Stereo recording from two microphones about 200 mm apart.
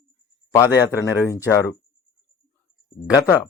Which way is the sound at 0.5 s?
15° left (ahead or behind).